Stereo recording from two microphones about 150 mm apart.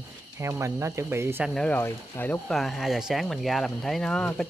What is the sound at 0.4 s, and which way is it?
Speech, 20° right (ahead or behind).